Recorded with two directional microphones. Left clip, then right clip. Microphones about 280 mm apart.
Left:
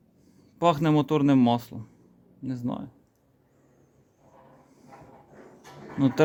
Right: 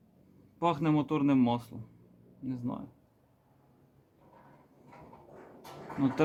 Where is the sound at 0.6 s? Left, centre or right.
Left.